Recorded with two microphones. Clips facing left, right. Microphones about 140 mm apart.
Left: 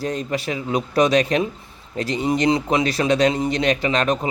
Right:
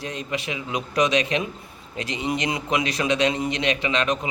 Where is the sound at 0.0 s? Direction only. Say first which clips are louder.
Left 5 dB; 40° left (ahead or behind).